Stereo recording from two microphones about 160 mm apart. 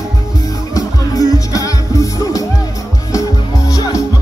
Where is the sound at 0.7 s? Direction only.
20° left (ahead or behind).